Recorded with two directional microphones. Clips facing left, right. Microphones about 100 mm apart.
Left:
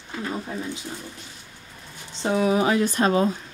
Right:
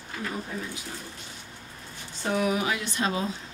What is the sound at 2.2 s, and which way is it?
Speech, 25° left (ahead or behind).